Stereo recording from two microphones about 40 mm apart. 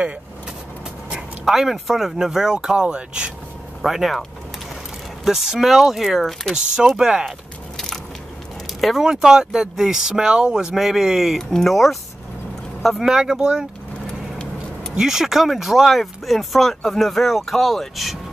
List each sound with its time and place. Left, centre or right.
1.4 s speech: centre; by 3.3 s right
3.8 s speech: centre
5.2 s speech: centre
6.5 s speech: centre
7.7 s crushing: centre
9.0 s speech: centre
11.3 s speech: centre
13.0 s speech: centre
15.0 s speech: centre